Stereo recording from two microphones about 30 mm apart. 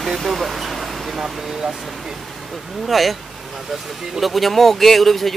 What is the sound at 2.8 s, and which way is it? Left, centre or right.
Speech, centre.